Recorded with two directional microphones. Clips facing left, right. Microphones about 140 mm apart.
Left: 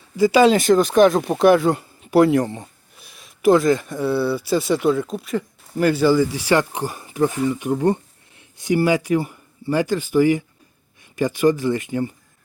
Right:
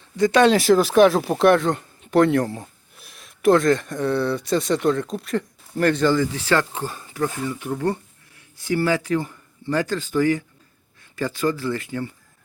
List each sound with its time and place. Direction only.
0.2 s speech: 5° left (ahead or behind)